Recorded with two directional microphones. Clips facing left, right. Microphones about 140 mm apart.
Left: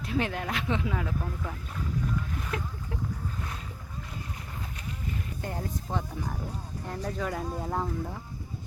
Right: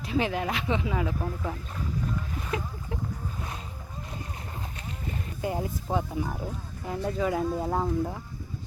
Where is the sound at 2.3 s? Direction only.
5° right (ahead or behind).